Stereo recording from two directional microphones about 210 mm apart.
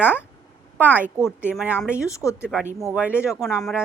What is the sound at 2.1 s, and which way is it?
Speech, 15° left (ahead or behind).